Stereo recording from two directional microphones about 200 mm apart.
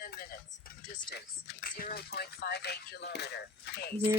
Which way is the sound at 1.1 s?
50° left (ahead or behind).